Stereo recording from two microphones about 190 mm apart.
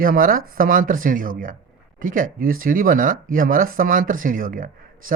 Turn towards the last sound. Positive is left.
turn(degrees=-45)  # may be behind; listen again after turning